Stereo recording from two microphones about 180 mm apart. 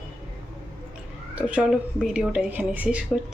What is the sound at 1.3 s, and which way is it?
A woman's voice, 5° right (ahead or behind).